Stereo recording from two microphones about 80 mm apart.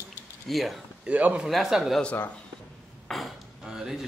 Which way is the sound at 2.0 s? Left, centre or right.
Centre.